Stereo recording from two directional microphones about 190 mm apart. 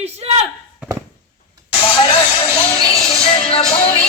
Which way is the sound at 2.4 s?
25° left (ahead or behind).